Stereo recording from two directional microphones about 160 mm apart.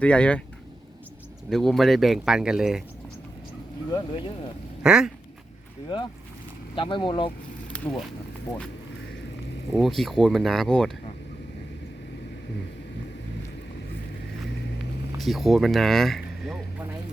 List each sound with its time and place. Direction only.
0.0 s speech: 5° left (ahead or behind)
1.5 s speech: centre (ahead or behind)
3.9 s speech: 30° left (ahead or behind)
4.8 s speech: 5° right (ahead or behind)
6.7 s speech: 30° left (ahead or behind)
7.7 s speech: 5° left (ahead or behind)
9.7 s speech: centre (ahead or behind)
15.2 s speech: centre (ahead or behind)